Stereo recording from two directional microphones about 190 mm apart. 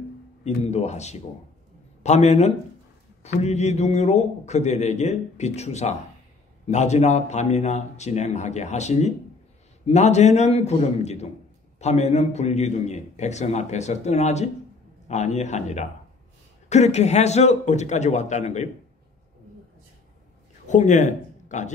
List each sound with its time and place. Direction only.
0.4 s a man's voice: 35° left (ahead or behind)
20.6 s speech: 40° left (ahead or behind)